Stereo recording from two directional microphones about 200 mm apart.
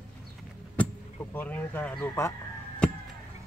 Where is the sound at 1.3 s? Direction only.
10° left (ahead or behind).